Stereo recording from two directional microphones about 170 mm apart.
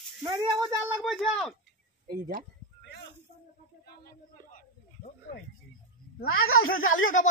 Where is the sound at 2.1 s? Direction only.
55° right (ahead or behind).